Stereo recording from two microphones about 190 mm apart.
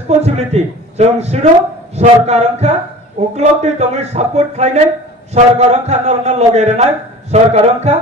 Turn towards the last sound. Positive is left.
turn(degrees=-35)  # may be behind; listen again after turning